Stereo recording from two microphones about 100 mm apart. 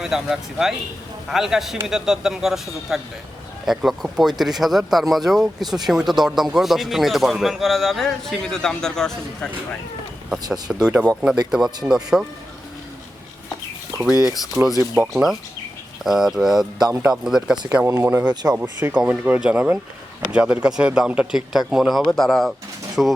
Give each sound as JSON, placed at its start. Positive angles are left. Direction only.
{"t": 0.0, "sound": "a man's voice", "side_deg": -5}
{"t": 10.5, "sound": "speech", "side_deg": -5}
{"t": 14.6, "sound": "speech", "side_deg": -30}
{"t": 15.1, "sound": "a man's voice", "side_deg": 0}
{"t": 17.8, "sound": "a man's voice", "side_deg": -25}